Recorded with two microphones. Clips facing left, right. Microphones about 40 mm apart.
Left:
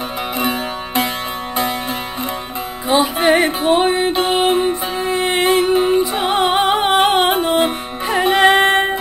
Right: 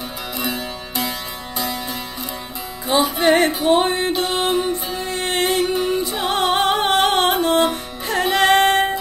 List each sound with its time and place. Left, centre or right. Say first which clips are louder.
0.4 s music: left 5 dB; left
2.9 s music: left 2 dB; left
4.1 s music: left 4 dB; left
5.0 s music: left 5 dB; centre
5.6 s music: left 5 dB; left
6.2 s music: right 1 dB; centre
7.2 s music: left 1 dB; left